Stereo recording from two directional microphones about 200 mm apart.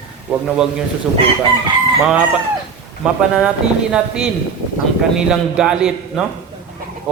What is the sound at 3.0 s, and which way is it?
Speech, 5° right (ahead or behind).